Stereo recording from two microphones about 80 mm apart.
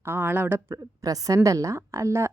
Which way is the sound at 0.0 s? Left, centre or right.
Right.